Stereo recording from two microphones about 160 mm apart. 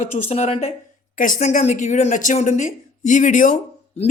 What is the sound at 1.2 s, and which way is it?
Speech, 55° left (ahead or behind).